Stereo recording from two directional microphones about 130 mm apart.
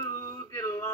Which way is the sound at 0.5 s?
25° left (ahead or behind).